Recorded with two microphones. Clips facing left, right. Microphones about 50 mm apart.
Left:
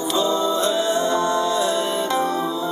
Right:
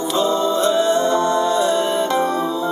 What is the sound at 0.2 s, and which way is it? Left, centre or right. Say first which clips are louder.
Music: right 3 dB; right.